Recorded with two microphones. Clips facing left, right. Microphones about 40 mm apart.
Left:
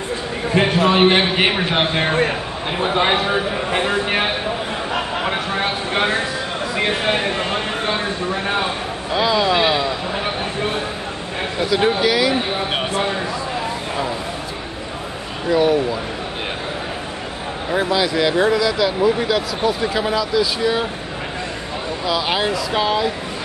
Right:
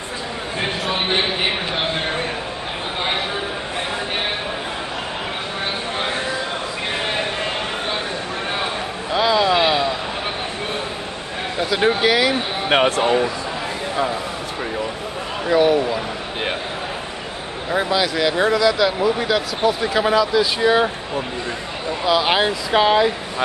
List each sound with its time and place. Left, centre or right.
0.8 s a man's voice: left
9.1 s a sound: centre
9.5 s vehicle: centre
11.7 s speech: centre
15.5 s speech: centre
17.6 s speech: centre
22.0 s speech: centre